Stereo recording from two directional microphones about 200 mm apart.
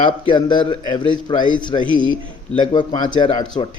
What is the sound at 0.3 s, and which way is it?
Speech, 25° left (ahead or behind).